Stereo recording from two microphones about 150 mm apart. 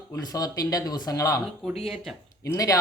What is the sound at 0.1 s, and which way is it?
Speech, 25° left (ahead or behind).